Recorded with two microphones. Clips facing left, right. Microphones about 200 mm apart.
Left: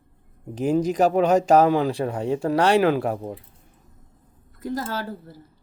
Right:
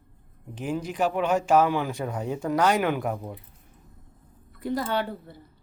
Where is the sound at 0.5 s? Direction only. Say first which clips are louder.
Left 8 dB; 40° left (ahead or behind).